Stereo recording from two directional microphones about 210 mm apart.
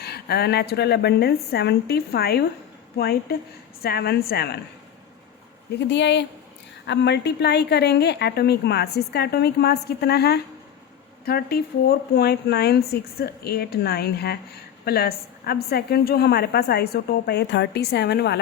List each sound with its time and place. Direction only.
0.0 s a woman's voice: 50° left (ahead or behind)
5.9 s a woman's voice: 55° left (ahead or behind)